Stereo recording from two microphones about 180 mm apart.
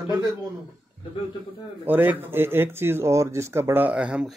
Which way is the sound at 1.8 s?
10° right (ahead or behind).